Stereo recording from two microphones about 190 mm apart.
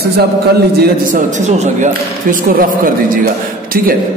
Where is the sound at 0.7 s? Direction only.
40° right (ahead or behind).